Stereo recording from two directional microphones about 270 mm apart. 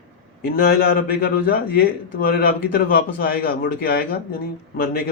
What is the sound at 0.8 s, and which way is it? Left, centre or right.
A man's voice, left.